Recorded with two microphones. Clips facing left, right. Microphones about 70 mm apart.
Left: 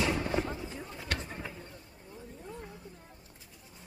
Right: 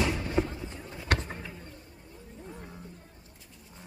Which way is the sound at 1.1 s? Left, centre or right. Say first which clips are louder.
Right 7 dB; right.